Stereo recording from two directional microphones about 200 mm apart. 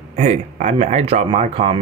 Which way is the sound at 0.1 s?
35° right (ahead or behind).